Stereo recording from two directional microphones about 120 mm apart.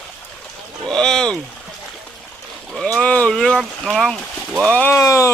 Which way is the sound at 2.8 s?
10° left (ahead or behind).